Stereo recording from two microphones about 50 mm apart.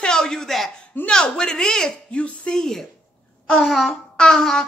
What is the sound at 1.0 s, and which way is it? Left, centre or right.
Speech, centre.